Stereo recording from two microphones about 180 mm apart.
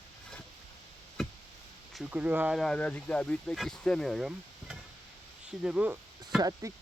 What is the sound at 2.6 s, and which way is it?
Speech, 5° left (ahead or behind).